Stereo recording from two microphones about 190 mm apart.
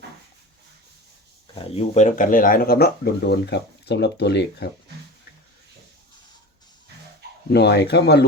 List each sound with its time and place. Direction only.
1.5 s speech: 35° left (ahead or behind); by 4.7 s 60° left (ahead or behind)
7.5 s speech: 60° left (ahead or behind)